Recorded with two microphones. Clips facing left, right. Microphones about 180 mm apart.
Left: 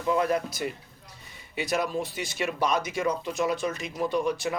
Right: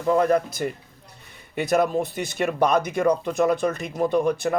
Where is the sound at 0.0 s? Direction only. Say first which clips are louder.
Right 6 dB; 50° right (ahead or behind).